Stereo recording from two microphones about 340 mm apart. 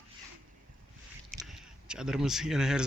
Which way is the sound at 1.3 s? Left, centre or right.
Centre.